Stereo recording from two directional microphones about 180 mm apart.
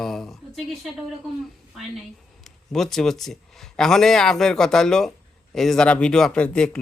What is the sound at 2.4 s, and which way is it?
A man's voice, centre (ahead or behind).